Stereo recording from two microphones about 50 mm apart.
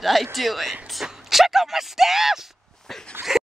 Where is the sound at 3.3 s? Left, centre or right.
Centre.